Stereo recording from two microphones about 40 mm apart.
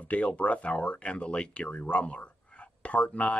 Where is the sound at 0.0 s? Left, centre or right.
Left.